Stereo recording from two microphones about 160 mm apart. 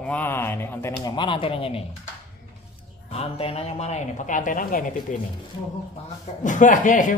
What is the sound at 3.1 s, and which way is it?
Speech, 40° left (ahead or behind).